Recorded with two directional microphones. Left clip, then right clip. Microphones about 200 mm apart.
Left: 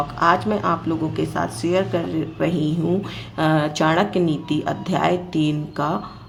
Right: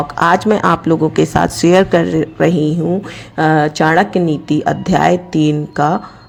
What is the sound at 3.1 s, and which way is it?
Speech, 30° right (ahead or behind).